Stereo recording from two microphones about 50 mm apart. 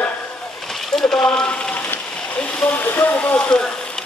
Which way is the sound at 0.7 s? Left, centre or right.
Centre.